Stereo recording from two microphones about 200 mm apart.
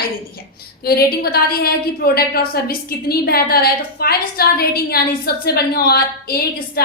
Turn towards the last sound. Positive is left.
turn(degrees=50)  # may be behind; listen again after turning